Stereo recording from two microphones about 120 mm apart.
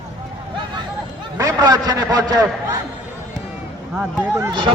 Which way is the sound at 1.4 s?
30° right (ahead or behind).